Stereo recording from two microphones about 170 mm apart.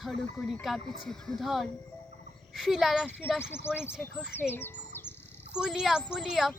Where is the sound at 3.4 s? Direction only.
15° left (ahead or behind).